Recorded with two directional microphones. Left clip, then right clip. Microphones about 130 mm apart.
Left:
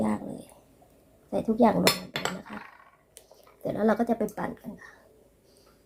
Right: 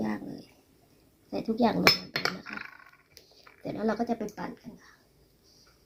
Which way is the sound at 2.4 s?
60° left (ahead or behind).